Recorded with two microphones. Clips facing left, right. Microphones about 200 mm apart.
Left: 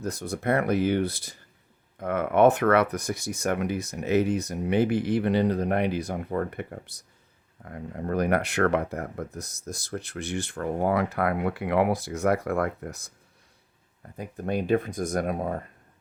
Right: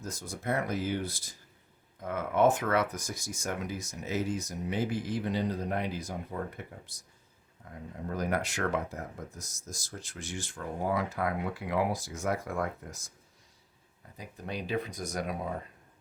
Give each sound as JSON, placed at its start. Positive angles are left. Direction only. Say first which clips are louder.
{"t": 0.0, "sound": "speech", "louder": "left 9 dB", "side_deg": 65}
{"t": 14.2, "sound": "speech", "louder": "left 9 dB", "side_deg": 55}